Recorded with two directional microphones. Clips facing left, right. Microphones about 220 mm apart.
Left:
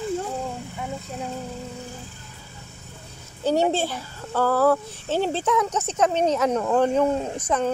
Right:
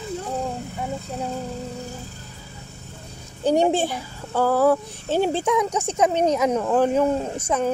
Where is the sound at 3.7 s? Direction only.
15° right (ahead or behind).